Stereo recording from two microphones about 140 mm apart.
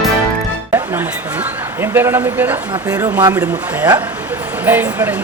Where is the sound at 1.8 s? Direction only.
15° right (ahead or behind).